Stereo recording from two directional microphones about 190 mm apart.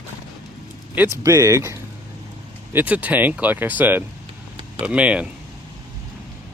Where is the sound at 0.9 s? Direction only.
15° right (ahead or behind).